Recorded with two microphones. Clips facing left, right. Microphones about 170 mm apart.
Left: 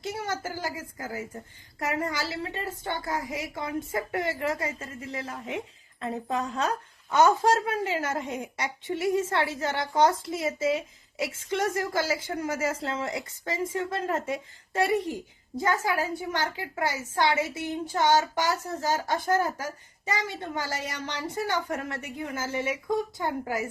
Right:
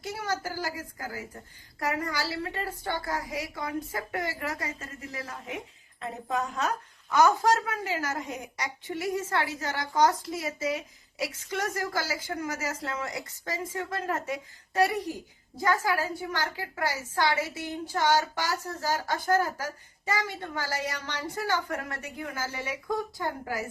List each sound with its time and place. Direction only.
0.0 s a woman's voice: 25° left (ahead or behind)